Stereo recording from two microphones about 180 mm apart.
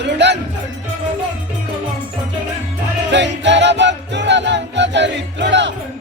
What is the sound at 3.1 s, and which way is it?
Music, 80° right.